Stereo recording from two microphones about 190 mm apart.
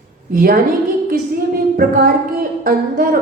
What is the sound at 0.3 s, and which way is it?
Speech, 50° right (ahead or behind).